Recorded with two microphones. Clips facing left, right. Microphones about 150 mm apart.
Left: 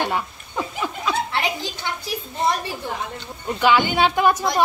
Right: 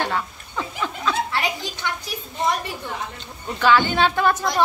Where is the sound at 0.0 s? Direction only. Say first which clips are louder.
Left 1 dB; 15° left (ahead or behind).